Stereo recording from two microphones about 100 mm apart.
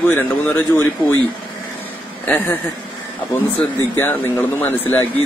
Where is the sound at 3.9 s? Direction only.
20° left (ahead or behind).